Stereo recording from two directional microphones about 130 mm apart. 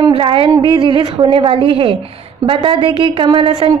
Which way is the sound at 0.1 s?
40° right (ahead or behind).